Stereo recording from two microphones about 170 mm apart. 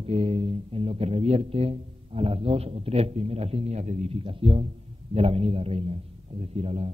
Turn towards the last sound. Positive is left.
turn(degrees=-35)  # may be behind; listen again after turning